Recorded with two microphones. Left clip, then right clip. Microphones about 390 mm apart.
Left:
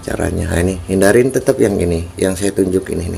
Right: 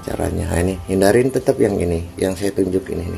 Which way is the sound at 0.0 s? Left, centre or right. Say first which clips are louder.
Left 3 dB; right.